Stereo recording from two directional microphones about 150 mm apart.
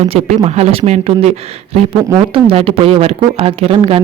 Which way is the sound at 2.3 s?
35° right (ahead or behind).